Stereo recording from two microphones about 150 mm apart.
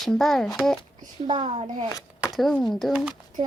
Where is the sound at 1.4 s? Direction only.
40° right (ahead or behind).